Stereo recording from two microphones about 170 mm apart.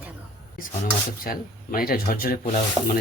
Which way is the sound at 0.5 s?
55° left (ahead or behind).